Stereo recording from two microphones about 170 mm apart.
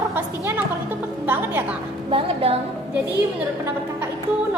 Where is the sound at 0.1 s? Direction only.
10° right (ahead or behind).